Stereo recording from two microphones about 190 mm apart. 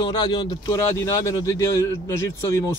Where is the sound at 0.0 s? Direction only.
25° left (ahead or behind).